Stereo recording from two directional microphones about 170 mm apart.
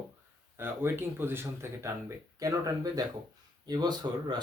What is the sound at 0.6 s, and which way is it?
Speech, 15° right (ahead or behind).